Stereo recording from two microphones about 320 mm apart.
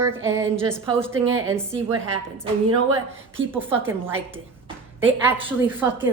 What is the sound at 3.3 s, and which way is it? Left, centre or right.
A woman's voice, centre.